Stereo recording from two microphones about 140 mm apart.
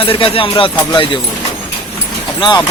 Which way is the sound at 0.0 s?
40° left (ahead or behind).